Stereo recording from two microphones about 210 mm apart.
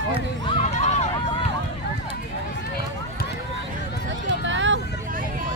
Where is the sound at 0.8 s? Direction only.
35° left (ahead or behind).